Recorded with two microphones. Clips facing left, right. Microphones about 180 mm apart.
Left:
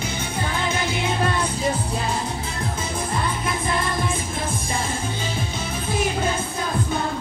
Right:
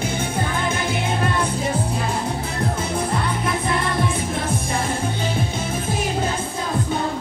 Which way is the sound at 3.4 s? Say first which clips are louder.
Right 2 dB; 65° right (ahead or behind).